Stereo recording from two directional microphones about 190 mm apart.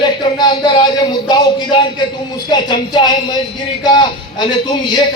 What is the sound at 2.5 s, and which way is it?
A man's voice, 25° left (ahead or behind).